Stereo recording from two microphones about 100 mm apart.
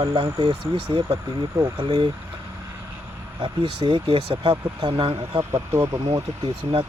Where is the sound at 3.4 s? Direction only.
60° right (ahead or behind).